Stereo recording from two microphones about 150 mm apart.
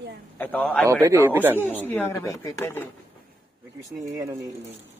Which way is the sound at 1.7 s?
10° left (ahead or behind).